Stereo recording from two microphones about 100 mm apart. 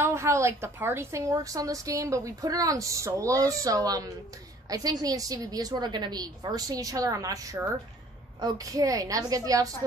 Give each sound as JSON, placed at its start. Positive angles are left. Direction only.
{"t": 0.0, "sound": "a woman's voice", "side_deg": -25}